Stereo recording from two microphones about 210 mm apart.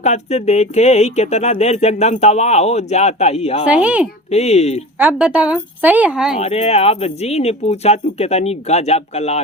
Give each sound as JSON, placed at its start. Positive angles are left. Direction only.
{"t": 0.0, "sound": "speech", "side_deg": 30}
{"t": 3.7, "sound": "speech", "side_deg": -5}
{"t": 4.3, "sound": "speech", "side_deg": 30}
{"t": 4.9, "sound": "a woman's voice", "side_deg": -5}
{"t": 6.4, "sound": "speech", "side_deg": 30}